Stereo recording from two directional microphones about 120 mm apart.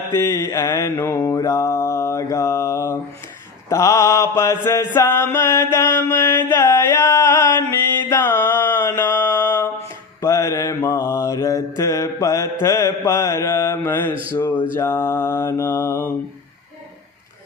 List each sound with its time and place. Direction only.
0.1 s mantra: 25° left (ahead or behind)
3.7 s chant: 25° left (ahead or behind)
9.0 s mantra: 15° left (ahead or behind)
10.2 s music: 25° left (ahead or behind)
10.8 s mantra: 20° left (ahead or behind)